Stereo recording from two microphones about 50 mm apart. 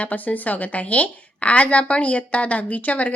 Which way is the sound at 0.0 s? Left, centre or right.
Left.